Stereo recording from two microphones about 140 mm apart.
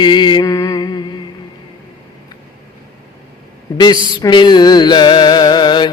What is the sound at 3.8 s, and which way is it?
Mantra, 30° left (ahead or behind).